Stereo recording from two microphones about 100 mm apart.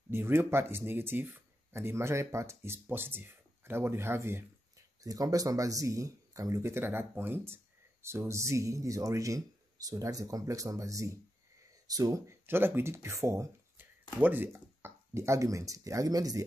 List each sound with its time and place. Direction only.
0.1 s speech: 25° right (ahead or behind)
5.0 s speech: 35° right (ahead or behind)
12.4 s speech: 20° right (ahead or behind); by 16.4 s 35° right (ahead or behind)